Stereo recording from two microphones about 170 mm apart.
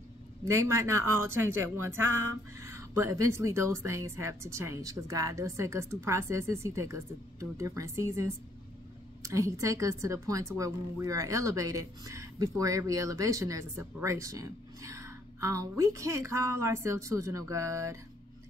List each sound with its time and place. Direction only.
0.5 s a woman's voice: 15° right (ahead or behind)